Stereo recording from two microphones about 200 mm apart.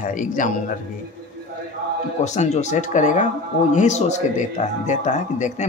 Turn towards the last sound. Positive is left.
turn(degrees=35)  # may be behind; listen again after turning